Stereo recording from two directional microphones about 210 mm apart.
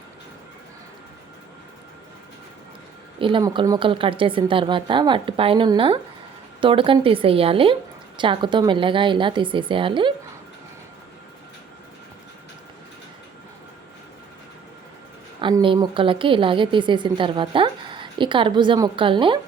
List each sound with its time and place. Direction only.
3.2 s a woman's voice: 25° right (ahead or behind)
15.4 s a woman's voice: 25° right (ahead or behind)